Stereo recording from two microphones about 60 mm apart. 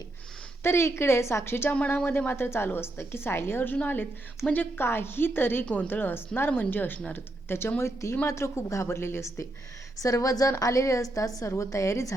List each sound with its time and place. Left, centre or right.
0.6 s a woman's voice: left
7.8 s speech: left
10.0 s speech: left
10.6 s a woman's voice: left